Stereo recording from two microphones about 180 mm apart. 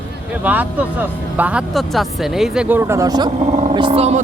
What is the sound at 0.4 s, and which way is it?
Speech, 10° right (ahead or behind).